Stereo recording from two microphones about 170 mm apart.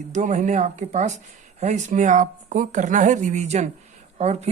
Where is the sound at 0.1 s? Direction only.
45° right (ahead or behind).